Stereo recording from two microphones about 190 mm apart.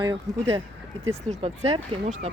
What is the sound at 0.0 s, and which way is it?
Speech, 25° right (ahead or behind).